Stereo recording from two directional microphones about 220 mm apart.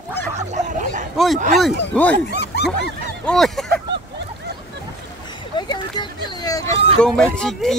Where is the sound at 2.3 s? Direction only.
50° left (ahead or behind).